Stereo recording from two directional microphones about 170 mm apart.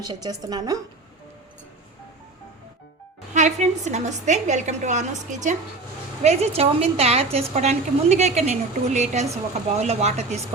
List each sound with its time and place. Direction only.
0.0 s a woman's voice: 25° right (ahead or behind)
3.3 s a woman's voice: 45° right (ahead or behind)